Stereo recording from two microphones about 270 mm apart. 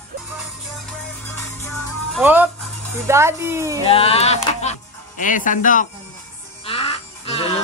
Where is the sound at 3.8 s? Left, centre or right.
Left.